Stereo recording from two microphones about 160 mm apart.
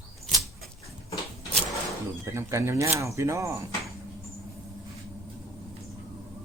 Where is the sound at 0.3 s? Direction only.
Centre (ahead or behind).